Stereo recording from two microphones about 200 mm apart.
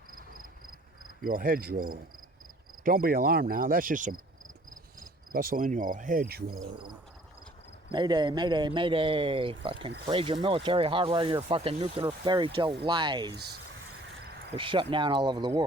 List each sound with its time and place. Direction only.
0.1 s a sound: 45° right (ahead or behind)
1.2 s cricket: 45° right (ahead or behind)
4.9 s insect: 45° right (ahead or behind)
7.9 s a man's voice: 20° right (ahead or behind)
13.3 s cricket: 55° right (ahead or behind)
14.5 s a man's voice: 25° right (ahead or behind)